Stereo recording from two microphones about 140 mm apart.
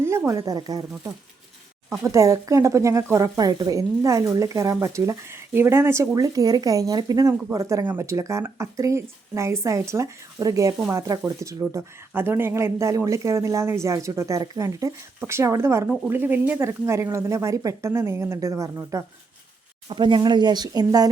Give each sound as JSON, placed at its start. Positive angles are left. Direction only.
{"t": 0.0, "sound": "speech", "side_deg": -20}
{"t": 19.9, "sound": "speech", "side_deg": -35}